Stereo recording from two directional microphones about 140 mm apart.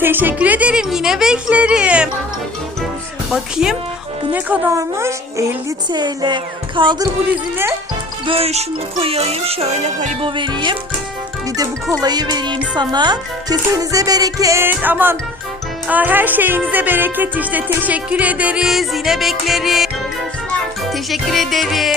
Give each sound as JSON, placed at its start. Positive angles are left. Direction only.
{"t": 0.0, "sound": "music", "side_deg": -15}
{"t": 3.3, "sound": "music", "side_deg": -5}
{"t": 4.3, "sound": "speech", "side_deg": -15}
{"t": 5.9, "sound": "speech", "side_deg": -30}
{"t": 8.3, "sound": "music", "side_deg": -45}
{"t": 10.2, "sound": "speech", "side_deg": -35}
{"t": 15.9, "sound": "music", "side_deg": -10}
{"t": 20.9, "sound": "music", "side_deg": 0}